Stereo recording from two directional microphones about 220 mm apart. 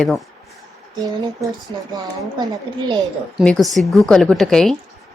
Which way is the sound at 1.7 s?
20° right (ahead or behind).